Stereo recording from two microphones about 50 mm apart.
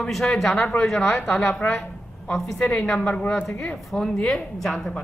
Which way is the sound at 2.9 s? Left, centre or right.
Left.